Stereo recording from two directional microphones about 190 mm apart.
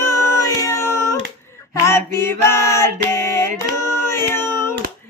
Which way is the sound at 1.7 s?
15° left (ahead or behind).